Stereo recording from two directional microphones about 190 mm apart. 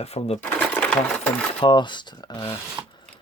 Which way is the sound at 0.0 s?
30° left (ahead or behind).